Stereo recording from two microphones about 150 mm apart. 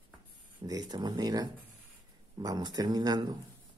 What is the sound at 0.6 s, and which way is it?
Speech, 25° right (ahead or behind).